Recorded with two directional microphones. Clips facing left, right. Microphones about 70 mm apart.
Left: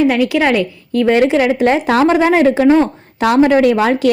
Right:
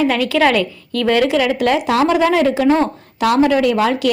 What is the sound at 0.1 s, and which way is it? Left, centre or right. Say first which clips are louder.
A woman's voice: left 1 dB; centre.